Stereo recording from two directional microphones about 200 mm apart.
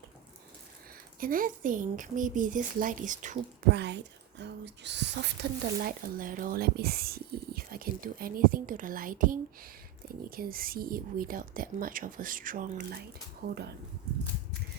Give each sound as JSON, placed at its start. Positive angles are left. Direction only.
{"t": 1.2, "sound": "speech", "side_deg": -45}
{"t": 3.7, "sound": "speech", "side_deg": -60}